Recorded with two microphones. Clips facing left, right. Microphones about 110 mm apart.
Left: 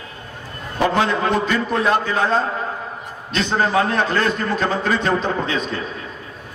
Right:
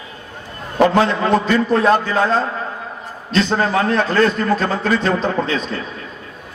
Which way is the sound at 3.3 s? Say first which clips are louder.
Right 2 dB; 35° right (ahead or behind).